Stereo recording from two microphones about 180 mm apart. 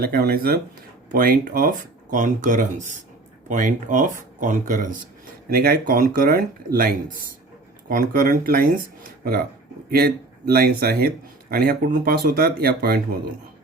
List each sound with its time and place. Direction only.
0.0 s speech: 55° right (ahead or behind)